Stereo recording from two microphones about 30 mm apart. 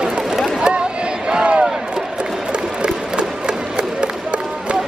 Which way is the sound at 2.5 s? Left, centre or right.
Right.